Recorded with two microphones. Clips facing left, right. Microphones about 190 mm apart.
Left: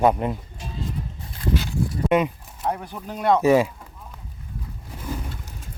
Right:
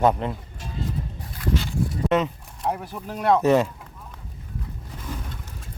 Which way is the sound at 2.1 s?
10° left (ahead or behind).